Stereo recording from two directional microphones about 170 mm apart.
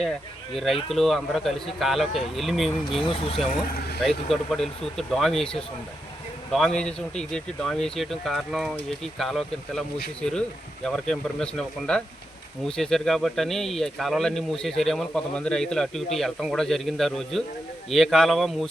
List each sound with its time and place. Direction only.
0.5 s speech: centre (ahead or behind)
3.0 s speech: 35° left (ahead or behind)
4.0 s speech: centre (ahead or behind)